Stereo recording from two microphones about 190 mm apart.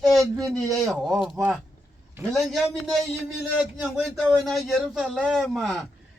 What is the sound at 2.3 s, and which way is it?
Speech, centre (ahead or behind).